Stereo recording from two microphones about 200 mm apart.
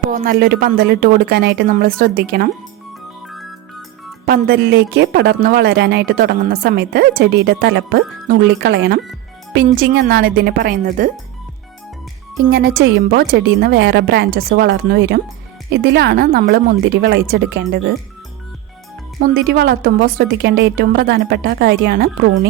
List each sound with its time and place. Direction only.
0.1 s speech: 45° right (ahead or behind)
4.3 s speech: 50° right (ahead or behind)
12.5 s a woman's voice: 50° right (ahead or behind)
19.2 s a woman's voice: 50° right (ahead or behind)